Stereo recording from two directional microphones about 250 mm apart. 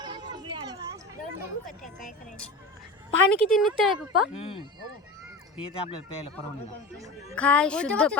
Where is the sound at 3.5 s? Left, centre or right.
Centre.